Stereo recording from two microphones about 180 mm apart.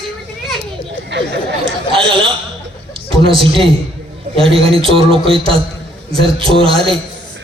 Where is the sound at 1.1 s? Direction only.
75° right (ahead or behind).